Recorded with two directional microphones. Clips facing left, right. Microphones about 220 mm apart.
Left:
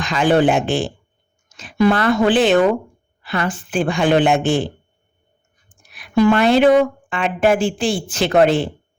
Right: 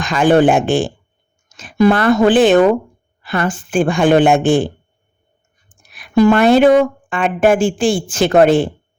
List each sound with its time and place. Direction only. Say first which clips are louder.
0.0 s speech: right 4 dB; 50° right (ahead or behind)
5.9 s speech: right 3 dB; 45° right (ahead or behind)